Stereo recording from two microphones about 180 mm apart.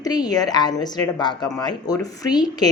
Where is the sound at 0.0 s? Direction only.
20° left (ahead or behind).